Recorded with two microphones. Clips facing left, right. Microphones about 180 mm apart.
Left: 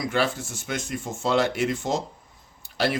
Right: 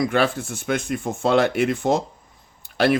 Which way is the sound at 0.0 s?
55° right (ahead or behind).